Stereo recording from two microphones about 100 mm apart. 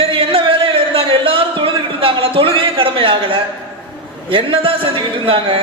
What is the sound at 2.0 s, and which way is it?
A man's voice, 65° right (ahead or behind).